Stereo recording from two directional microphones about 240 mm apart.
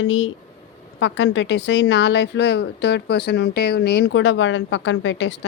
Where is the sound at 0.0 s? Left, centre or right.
Left.